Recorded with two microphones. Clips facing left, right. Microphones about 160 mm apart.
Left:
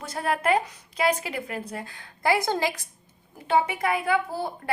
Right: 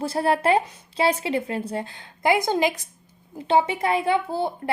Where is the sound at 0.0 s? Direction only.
30° right (ahead or behind).